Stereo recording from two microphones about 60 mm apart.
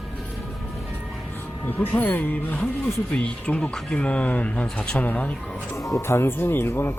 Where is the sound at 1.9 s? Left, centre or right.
Left.